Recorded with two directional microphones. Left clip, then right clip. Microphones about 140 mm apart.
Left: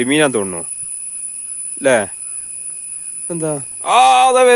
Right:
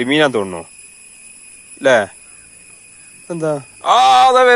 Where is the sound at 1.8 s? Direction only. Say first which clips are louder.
Right 2 dB; 30° left (ahead or behind).